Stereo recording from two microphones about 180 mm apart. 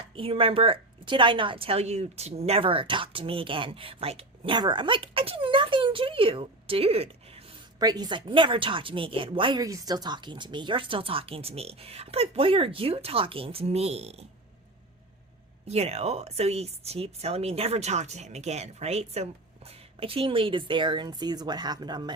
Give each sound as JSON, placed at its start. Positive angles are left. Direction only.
{"t": 0.2, "sound": "a woman's voice", "side_deg": -30}
{"t": 7.8, "sound": "a woman's voice", "side_deg": -20}
{"t": 15.6, "sound": "a woman's voice", "side_deg": -35}